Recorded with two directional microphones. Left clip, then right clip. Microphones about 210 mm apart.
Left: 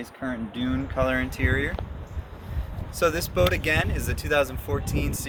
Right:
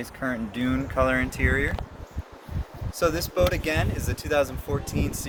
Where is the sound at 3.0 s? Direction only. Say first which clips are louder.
Even; 5° left (ahead or behind).